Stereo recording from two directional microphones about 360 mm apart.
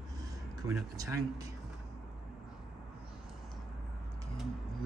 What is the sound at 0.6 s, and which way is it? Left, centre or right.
Speech, centre.